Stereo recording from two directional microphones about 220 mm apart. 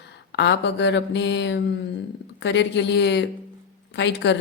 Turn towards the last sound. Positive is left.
turn(degrees=55)  # may be behind; listen again after turning